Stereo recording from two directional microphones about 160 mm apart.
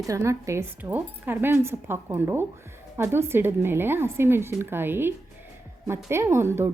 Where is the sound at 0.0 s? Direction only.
20° right (ahead or behind).